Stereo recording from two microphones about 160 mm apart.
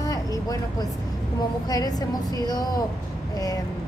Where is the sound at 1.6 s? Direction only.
25° left (ahead or behind).